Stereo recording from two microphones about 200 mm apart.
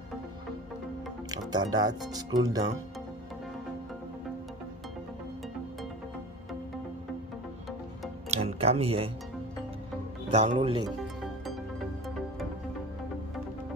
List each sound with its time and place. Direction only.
1.5 s speech: 20° right (ahead or behind)
8.3 s tick-tock: 30° right (ahead or behind)
10.3 s speech: 30° right (ahead or behind)